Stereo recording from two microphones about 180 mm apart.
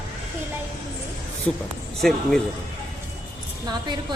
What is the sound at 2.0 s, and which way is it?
Speech, centre (ahead or behind).